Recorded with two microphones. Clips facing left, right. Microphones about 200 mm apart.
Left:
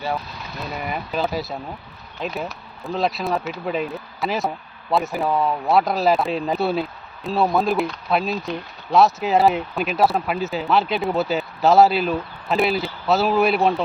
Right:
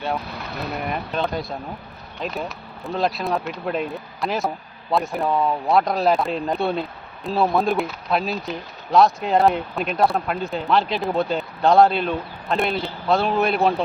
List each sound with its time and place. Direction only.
0.6 s speech: centre (ahead or behind)